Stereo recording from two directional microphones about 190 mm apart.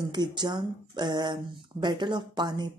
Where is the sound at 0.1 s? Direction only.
20° right (ahead or behind).